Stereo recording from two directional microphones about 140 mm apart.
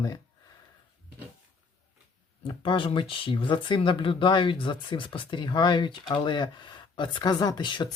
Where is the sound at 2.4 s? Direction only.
35° left (ahead or behind).